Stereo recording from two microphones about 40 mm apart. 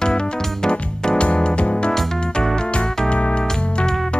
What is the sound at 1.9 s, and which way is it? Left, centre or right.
Music, centre.